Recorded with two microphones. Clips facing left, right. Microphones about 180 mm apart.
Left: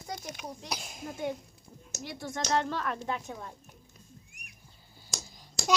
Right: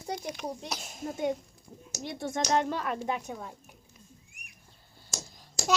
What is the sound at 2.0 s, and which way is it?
Speech, 25° right (ahead or behind).